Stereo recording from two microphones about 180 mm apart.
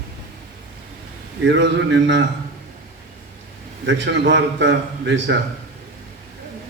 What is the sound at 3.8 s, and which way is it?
A man's voice, 90° right.